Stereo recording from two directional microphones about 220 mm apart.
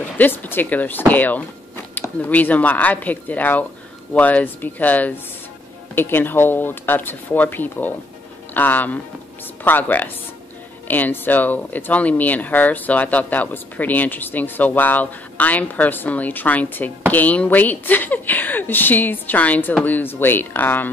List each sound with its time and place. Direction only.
0.2 s speech: 10° left (ahead or behind)